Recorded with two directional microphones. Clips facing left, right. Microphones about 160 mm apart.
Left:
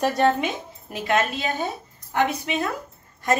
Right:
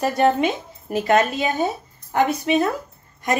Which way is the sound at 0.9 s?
40° right (ahead or behind).